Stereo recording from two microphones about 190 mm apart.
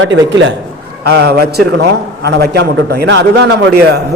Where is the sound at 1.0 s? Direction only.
60° right (ahead or behind).